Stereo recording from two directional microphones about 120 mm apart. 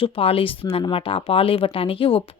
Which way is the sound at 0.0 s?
50° left (ahead or behind).